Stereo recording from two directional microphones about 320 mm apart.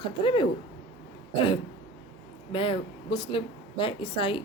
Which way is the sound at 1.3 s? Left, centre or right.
Centre.